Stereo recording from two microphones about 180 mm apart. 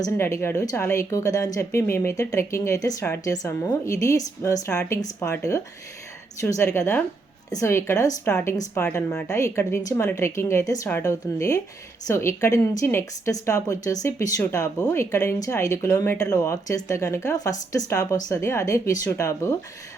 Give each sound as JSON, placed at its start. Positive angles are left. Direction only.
{"t": 0.0, "sound": "speech", "side_deg": 15}